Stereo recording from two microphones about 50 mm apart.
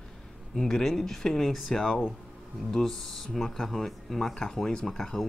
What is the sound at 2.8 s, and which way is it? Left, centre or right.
Speech, centre.